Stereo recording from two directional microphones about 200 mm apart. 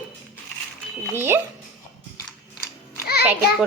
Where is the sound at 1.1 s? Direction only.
10° right (ahead or behind).